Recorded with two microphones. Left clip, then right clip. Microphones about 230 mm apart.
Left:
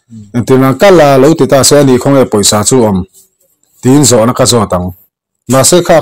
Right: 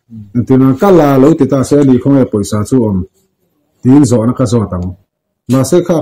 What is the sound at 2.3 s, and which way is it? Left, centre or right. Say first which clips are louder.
Speech: left 7 dB; left.